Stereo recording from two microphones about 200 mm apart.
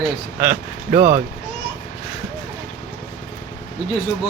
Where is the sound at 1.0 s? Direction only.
30° right (ahead or behind).